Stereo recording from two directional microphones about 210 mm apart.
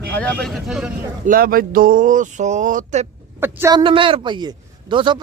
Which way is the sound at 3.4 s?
15° right (ahead or behind).